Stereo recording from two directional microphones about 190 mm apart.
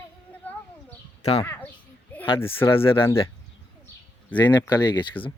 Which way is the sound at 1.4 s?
10° left (ahead or behind).